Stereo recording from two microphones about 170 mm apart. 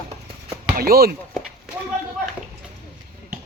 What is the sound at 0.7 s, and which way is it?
Speech, 60° right (ahead or behind).